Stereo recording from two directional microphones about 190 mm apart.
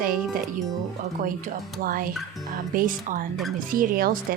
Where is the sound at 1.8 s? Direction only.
50° right (ahead or behind).